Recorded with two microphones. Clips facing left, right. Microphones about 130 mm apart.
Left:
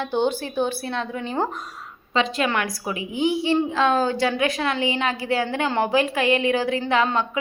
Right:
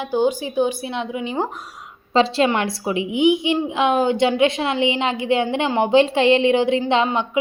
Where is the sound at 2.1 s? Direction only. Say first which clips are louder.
Right 5 dB; 30° right (ahead or behind).